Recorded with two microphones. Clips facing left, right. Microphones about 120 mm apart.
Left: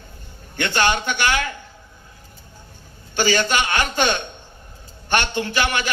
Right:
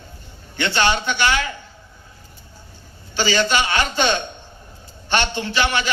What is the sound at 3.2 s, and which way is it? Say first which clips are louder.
A man's voice: even; 50° left (ahead or behind).